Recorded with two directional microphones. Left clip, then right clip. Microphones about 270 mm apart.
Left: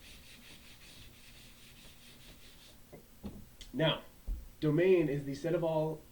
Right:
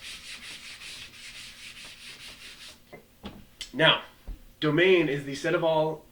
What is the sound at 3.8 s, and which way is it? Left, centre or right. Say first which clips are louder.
Speech: right 11 dB; centre.